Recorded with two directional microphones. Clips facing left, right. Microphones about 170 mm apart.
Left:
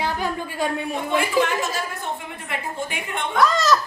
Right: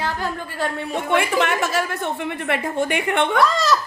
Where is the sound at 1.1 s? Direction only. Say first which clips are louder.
Right 1 dB; 70° right (ahead or behind).